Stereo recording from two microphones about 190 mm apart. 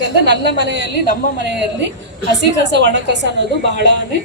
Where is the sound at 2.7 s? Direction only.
65° right (ahead or behind).